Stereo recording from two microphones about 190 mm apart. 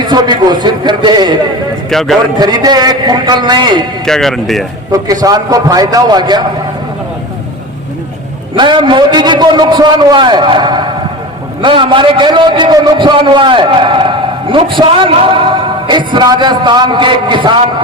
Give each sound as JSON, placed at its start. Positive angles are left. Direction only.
{"t": 0.0, "sound": "a man's voice", "side_deg": -25}
{"t": 1.9, "sound": "speech", "side_deg": 0}
{"t": 2.4, "sound": "a man's voice", "side_deg": -20}
{"t": 4.0, "sound": "speech", "side_deg": 0}
{"t": 4.9, "sound": "a man's voice", "side_deg": -20}
{"t": 8.5, "sound": "a man's voice", "side_deg": -25}